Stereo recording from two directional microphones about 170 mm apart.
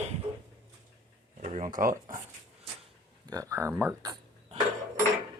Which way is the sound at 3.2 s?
20° right (ahead or behind).